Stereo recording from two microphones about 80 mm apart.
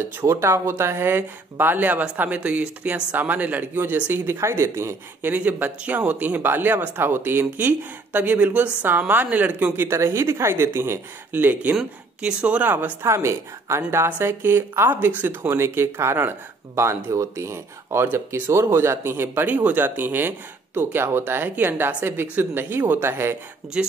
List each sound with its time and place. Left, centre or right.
0.2 s speech: right
5.3 s speech: right
9.8 s speech: right
11.7 s speech: centre; by 18.0 s right
18.0 s speech: right
18.5 s speech: right
23.8 s speech: centre